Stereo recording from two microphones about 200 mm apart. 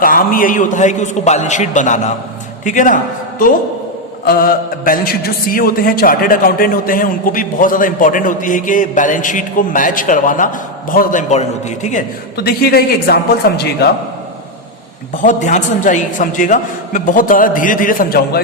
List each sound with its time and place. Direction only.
0.0 s a man's voice: 45° left (ahead or behind)
15.1 s a man's voice: 40° left (ahead or behind)